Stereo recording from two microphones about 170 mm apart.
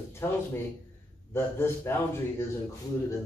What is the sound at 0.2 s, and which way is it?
A man's voice, 15° left (ahead or behind).